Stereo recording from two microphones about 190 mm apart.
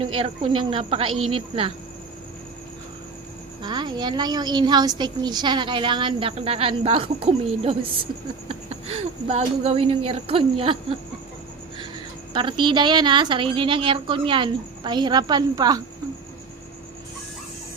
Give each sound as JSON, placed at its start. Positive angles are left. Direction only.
{"t": 0.0, "sound": "a woman's voice", "side_deg": -30}
{"t": 3.6, "sound": "a woman's voice", "side_deg": -25}
{"t": 12.3, "sound": "a woman's voice", "side_deg": -25}